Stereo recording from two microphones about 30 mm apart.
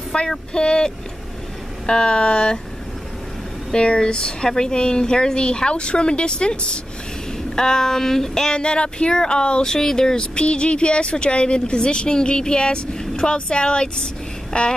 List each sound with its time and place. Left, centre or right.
0.1 s speech: left
3.7 s speech: left
7.5 s a sound: centre
8.5 s speech: left
9.7 s speech: centre
10.4 s speech: left
14.5 s a sound: left